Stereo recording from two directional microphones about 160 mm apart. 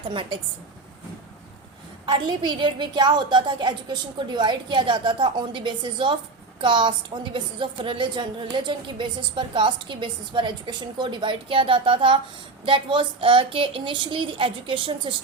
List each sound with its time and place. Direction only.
0.0 s a woman's voice: 30° right (ahead or behind)
2.0 s a woman's voice: 30° right (ahead or behind)